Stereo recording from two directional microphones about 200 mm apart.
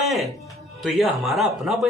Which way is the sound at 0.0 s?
Centre (ahead or behind).